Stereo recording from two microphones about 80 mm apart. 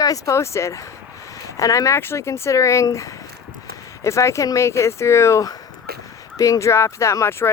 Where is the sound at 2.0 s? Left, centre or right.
Left.